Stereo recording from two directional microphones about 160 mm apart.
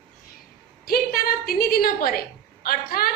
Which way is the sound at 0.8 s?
70° left (ahead or behind).